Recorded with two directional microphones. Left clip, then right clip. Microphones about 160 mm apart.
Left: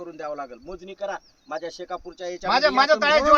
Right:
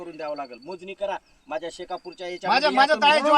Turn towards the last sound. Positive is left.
turn(degrees=20)  # may be behind; listen again after turning